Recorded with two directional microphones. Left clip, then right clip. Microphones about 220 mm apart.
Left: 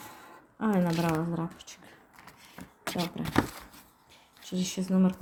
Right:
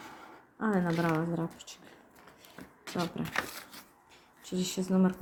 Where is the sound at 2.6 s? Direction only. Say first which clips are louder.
Left 1 dB; 50° left (ahead or behind).